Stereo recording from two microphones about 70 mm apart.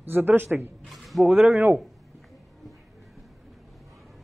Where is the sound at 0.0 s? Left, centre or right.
Right.